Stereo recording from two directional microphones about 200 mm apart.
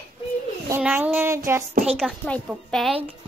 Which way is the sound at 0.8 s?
10° right (ahead or behind).